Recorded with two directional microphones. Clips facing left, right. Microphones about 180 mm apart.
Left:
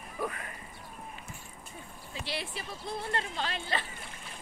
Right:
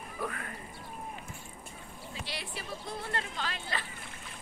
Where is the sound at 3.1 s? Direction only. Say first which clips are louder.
Left 2 dB; 30° left (ahead or behind).